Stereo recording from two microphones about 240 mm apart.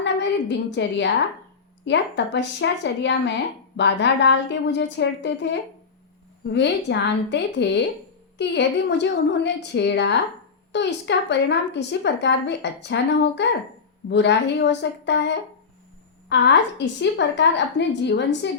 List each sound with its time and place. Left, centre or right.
0.0 s a woman's voice: left